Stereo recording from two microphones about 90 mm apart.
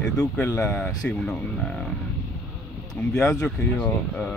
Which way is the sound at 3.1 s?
10° left (ahead or behind).